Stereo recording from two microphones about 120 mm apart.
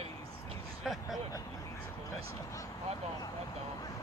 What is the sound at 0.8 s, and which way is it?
Speech, centre (ahead or behind).